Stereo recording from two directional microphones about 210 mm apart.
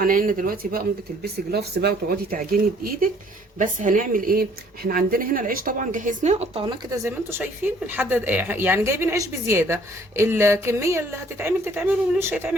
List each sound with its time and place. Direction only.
0.0 s speech: 40° right (ahead or behind); by 12.5 s 5° right (ahead or behind)